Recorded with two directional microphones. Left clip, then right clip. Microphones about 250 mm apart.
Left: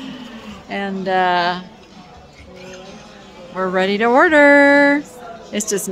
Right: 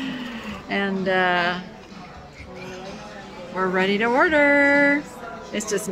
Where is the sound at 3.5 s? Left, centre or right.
Centre.